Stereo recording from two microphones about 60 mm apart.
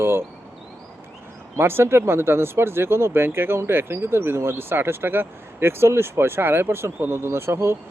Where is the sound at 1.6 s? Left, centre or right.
Right.